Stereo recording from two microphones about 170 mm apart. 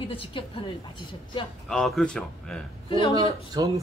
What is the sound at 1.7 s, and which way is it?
Speech, 5° left (ahead or behind).